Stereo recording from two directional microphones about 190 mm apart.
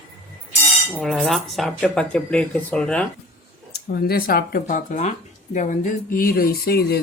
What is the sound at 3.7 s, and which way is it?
Speech, 55° left (ahead or behind).